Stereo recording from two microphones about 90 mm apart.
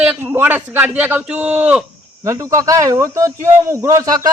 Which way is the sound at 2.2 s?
35° right (ahead or behind).